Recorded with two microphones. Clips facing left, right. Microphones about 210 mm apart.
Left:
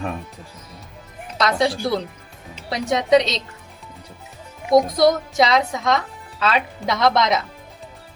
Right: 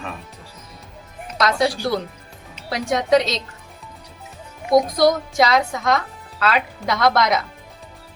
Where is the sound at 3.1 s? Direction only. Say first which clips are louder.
Left 1 dB; centre (ahead or behind).